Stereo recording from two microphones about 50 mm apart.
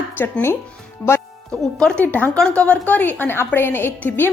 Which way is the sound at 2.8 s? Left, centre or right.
Left.